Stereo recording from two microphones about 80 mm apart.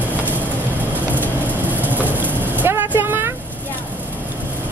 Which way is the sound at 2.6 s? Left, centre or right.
Right.